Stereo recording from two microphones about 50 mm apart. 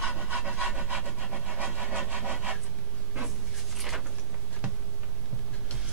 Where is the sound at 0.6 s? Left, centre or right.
Right.